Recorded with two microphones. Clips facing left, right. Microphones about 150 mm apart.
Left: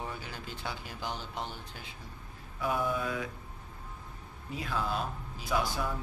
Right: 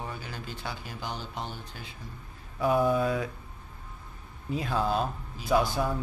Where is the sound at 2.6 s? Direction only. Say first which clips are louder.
Right 7 dB; 35° right (ahead or behind).